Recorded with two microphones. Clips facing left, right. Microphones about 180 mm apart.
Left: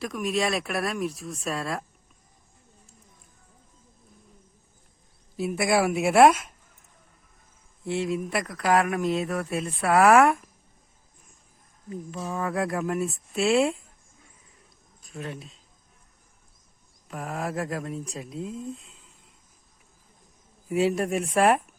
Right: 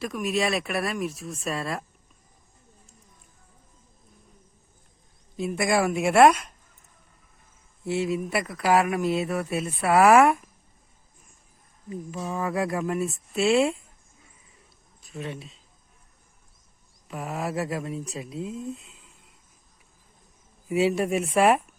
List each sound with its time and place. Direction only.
0.0 s speech: centre (ahead or behind)
5.4 s speech: 5° left (ahead or behind)
7.9 s speech: centre (ahead or behind)
11.9 s speech: centre (ahead or behind)
15.0 s speech: centre (ahead or behind)
17.1 s speech: centre (ahead or behind)
20.7 s speech: 5° right (ahead or behind)